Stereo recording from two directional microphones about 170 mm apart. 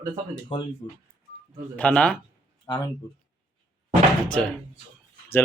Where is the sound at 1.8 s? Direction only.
5° left (ahead or behind).